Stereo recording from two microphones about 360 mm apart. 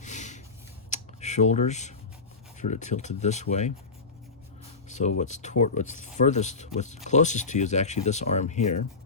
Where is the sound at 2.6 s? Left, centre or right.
Centre.